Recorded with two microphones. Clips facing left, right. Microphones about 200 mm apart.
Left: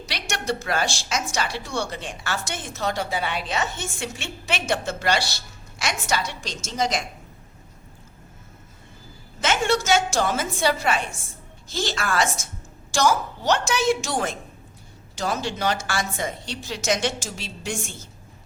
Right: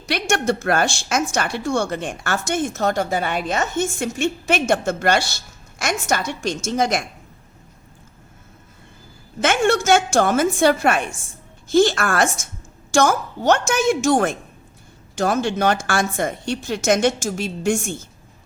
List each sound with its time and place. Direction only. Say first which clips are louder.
0.0 s a woman's voice: right 9 dB; 50° right (ahead or behind)
9.4 s a woman's voice: right 5 dB; 55° right (ahead or behind)